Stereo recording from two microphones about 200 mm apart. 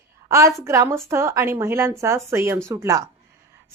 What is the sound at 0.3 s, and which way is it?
A woman's voice, 15° right (ahead or behind).